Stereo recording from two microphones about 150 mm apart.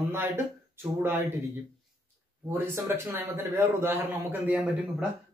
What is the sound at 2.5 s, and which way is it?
A man's voice, 15° right (ahead or behind).